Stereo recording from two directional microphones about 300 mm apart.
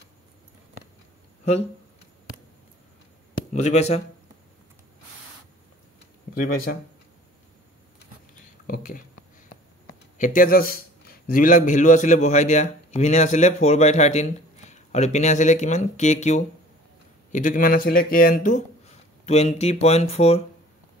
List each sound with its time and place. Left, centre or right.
3.5 s a man's voice: left
6.3 s a man's voice: left
8.6 s speech: left
10.1 s a man's voice: left